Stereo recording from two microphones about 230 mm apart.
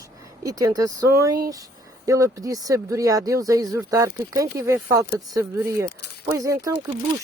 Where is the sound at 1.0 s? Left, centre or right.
Right.